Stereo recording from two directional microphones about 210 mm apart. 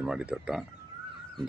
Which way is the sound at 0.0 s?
5° right (ahead or behind).